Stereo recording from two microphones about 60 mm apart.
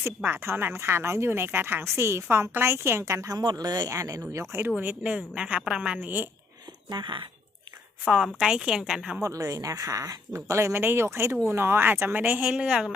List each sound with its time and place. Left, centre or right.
0.3 s a woman's voice: right
4.8 s a woman's voice: right
6.0 s speech: right
8.4 s a woman's voice: centre
9.2 s speech: right
10.3 s speech: right
12.6 s a woman's voice: centre